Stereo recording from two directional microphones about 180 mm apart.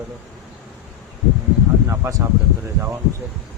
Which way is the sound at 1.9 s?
15° right (ahead or behind).